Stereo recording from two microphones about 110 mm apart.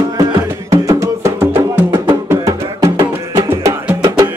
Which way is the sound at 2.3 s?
30° right (ahead or behind).